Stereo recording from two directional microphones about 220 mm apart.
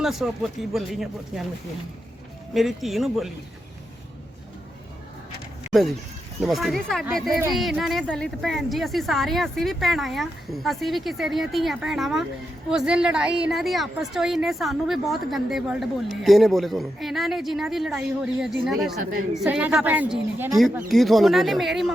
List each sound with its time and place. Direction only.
0.0 s a woman's voice: centre (ahead or behind)
2.5 s a woman's voice: centre (ahead or behind)
6.4 s a woman's voice: centre (ahead or behind)